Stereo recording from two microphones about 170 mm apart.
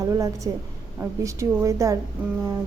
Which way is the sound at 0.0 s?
20° right (ahead or behind).